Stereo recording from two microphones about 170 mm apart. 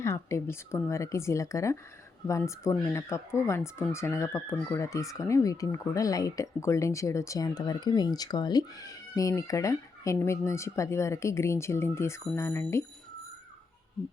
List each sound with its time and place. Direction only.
0.0 s speech: 15° left (ahead or behind)